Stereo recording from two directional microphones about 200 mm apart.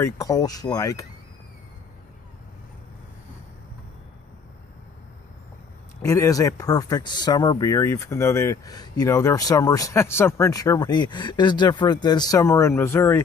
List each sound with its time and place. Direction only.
0.0 s speech: 15° left (ahead or behind)
6.0 s speech: 15° left (ahead or behind)